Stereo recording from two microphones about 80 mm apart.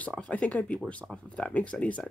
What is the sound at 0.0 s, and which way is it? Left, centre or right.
Speech, centre.